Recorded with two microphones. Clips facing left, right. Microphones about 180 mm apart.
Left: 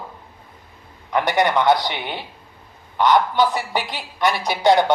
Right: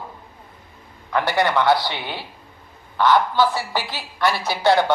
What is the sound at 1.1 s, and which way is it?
A man's voice, 20° left (ahead or behind).